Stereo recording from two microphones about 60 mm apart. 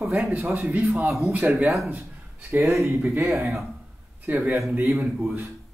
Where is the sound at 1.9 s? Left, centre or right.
Right.